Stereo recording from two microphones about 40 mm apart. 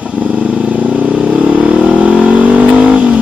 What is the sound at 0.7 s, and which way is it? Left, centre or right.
Vehicle, right.